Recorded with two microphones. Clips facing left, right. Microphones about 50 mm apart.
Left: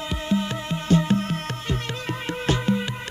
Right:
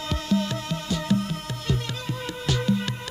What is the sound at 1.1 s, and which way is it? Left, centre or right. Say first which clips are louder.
Music: left 2 dB; left.